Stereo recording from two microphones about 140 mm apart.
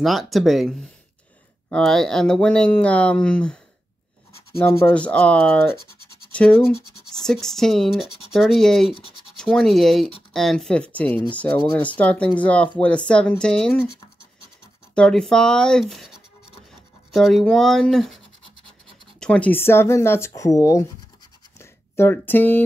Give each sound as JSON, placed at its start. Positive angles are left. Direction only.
{"t": 0.0, "sound": "speech", "side_deg": 0}
{"t": 4.6, "sound": "speech", "side_deg": 15}
{"t": 15.0, "sound": "speech", "side_deg": 5}
{"t": 21.5, "sound": "a sound", "side_deg": 15}